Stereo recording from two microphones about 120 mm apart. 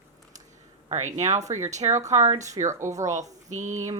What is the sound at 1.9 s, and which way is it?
A woman's voice, 25° right (ahead or behind).